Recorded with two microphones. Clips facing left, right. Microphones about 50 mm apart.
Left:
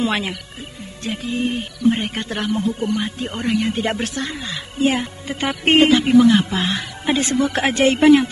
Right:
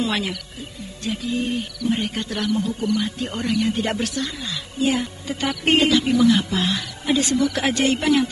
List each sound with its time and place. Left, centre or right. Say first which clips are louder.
0.0 s a woman's voice: left 2 dB; left
3.2 s speech: left 1 dB; centre
3.4 s speech: left 2 dB; left
3.7 s a woman's voice: left 2 dB; left
4.0 s speech: left 1 dB; left